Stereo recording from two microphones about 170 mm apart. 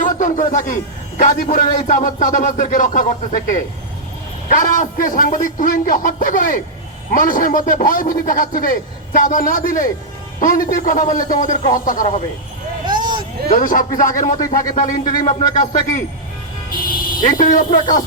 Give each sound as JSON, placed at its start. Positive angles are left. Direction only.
{"t": 0.0, "sound": "a man's voice", "side_deg": 50}
{"t": 12.8, "sound": "vehicle", "side_deg": -25}
{"t": 13.5, "sound": "a man's voice", "side_deg": 50}
{"t": 15.0, "sound": "speech", "side_deg": 25}
{"t": 15.4, "sound": "a man's voice", "side_deg": 45}
{"t": 16.9, "sound": "a sound", "side_deg": 55}
{"t": 17.2, "sound": "a man's voice", "side_deg": 50}